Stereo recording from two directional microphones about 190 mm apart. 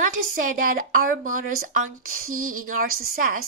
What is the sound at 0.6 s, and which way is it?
Speech, 45° right (ahead or behind).